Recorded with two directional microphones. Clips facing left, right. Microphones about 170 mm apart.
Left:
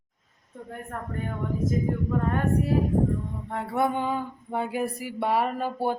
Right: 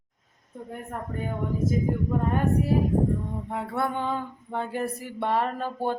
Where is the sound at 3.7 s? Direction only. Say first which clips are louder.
Left 3 dB; 15° left (ahead or behind).